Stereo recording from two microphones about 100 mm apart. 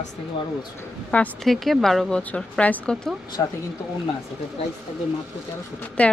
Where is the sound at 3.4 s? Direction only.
35° left (ahead or behind).